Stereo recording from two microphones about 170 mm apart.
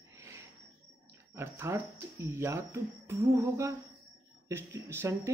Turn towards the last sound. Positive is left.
turn(degrees=-15)  # may be behind; listen again after turning